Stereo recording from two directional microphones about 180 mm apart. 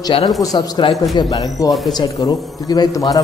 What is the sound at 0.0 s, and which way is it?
A man's voice, 30° left (ahead or behind).